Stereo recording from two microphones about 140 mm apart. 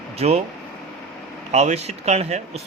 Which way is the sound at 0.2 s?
45° right (ahead or behind).